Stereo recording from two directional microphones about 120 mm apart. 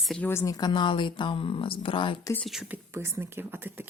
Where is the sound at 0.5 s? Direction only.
40° left (ahead or behind).